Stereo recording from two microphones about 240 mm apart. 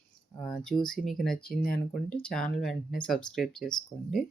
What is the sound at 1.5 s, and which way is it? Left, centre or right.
Speech, left.